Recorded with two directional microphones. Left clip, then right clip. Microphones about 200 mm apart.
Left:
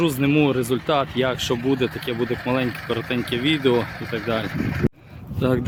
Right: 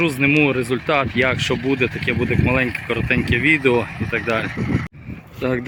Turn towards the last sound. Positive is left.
turn(degrees=5)  # may be behind; listen again after turning